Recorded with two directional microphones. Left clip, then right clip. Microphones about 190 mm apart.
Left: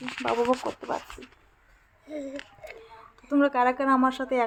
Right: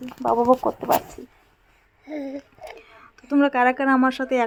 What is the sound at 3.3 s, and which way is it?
Speech, 25° right (ahead or behind).